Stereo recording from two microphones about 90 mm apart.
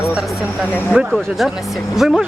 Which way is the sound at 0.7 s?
25° left (ahead or behind).